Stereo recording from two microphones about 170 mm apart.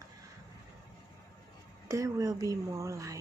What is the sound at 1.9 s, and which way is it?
Speech, 20° right (ahead or behind).